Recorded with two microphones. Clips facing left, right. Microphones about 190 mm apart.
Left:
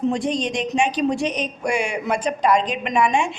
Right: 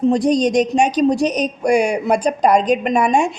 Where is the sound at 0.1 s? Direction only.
40° right (ahead or behind).